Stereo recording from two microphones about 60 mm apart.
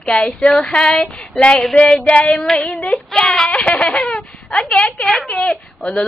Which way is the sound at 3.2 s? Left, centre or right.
Centre.